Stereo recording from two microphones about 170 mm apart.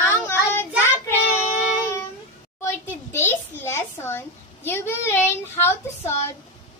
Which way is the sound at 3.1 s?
15° left (ahead or behind).